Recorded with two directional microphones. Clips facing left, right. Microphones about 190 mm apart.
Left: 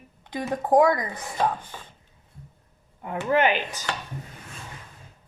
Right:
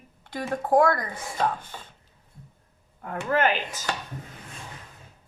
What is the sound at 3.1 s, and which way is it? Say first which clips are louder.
Speech: left 2 dB; 10° left (ahead or behind).